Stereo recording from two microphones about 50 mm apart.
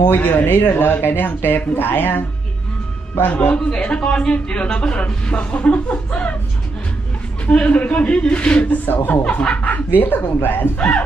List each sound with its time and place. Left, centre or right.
0.0 s speech: left
3.2 s speech: left
3.5 s speech: centre
7.4 s speech: left
8.8 s speech: left
9.2 s speech: left
9.9 s speech: left